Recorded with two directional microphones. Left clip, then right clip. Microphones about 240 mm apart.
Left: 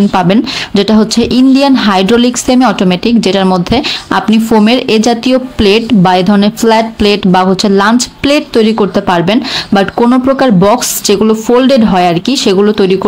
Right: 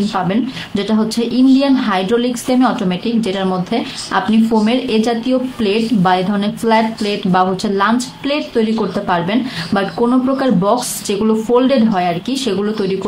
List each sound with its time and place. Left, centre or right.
0.1 s speech: left